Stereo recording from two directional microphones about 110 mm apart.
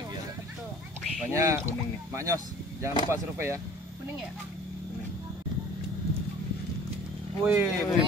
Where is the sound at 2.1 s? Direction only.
30° right (ahead or behind).